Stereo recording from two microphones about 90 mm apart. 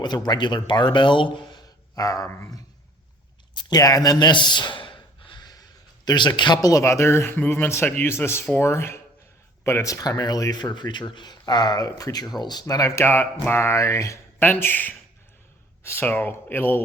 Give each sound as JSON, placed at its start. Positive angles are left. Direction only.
{"t": 0.0, "sound": "speech", "side_deg": 50}
{"t": 2.0, "sound": "speech", "side_deg": 40}
{"t": 3.5, "sound": "gasp", "side_deg": 50}
{"t": 6.1, "sound": "speech", "side_deg": 60}
{"t": 6.6, "sound": "a man's voice", "side_deg": 40}
{"t": 9.9, "sound": "speech", "side_deg": 40}
{"t": 14.4, "sound": "a man's voice", "side_deg": 20}